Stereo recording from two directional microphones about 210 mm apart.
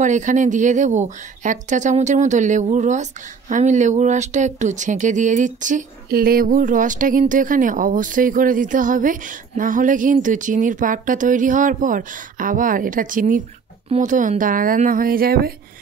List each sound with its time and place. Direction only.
0.0 s speech: 35° right (ahead or behind)